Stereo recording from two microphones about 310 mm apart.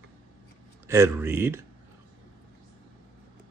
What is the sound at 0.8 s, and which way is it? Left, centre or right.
Speech, centre.